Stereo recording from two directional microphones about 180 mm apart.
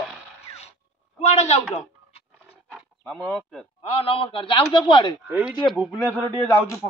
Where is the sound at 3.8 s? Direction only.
30° left (ahead or behind).